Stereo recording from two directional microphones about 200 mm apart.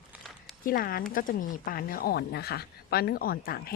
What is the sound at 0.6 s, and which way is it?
Speech, 45° left (ahead or behind).